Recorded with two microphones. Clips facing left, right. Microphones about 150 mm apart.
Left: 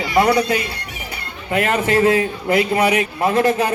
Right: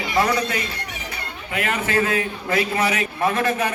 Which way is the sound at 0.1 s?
30° left (ahead or behind).